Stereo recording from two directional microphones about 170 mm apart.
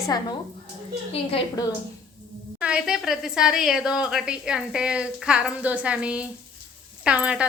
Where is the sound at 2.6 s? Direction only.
5° right (ahead or behind).